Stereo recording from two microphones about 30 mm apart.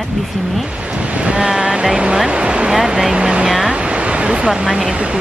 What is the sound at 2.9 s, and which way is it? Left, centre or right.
Vehicle, centre.